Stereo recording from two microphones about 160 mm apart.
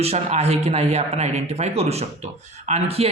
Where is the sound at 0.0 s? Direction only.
40° right (ahead or behind).